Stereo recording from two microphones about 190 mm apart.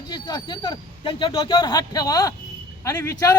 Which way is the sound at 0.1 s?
20° left (ahead or behind).